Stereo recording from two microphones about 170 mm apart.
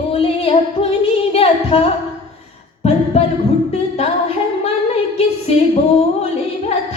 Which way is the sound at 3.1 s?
40° left (ahead or behind).